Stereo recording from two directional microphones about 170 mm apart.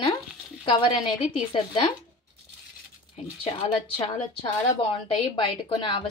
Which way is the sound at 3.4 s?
35° left (ahead or behind).